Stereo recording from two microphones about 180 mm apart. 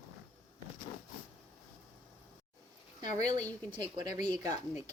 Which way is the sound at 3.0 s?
20° right (ahead or behind).